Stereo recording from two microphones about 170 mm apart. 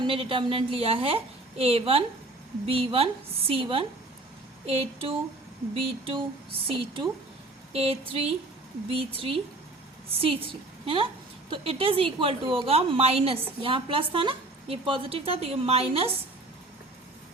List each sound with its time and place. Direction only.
0.0 s a woman's voice: 30° right (ahead or behind)